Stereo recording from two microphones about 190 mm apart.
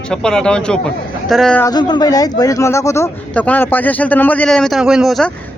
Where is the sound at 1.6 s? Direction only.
20° left (ahead or behind).